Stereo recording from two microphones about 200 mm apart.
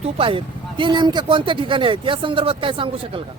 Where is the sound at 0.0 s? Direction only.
25° right (ahead or behind).